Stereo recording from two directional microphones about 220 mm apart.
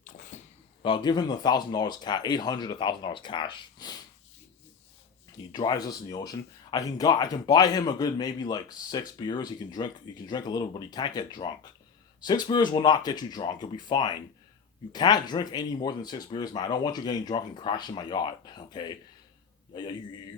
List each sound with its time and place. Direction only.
0.0 s a sound: 35° left (ahead or behind)
0.8 s speech: 20° left (ahead or behind)
5.5 s speech: 20° left (ahead or behind)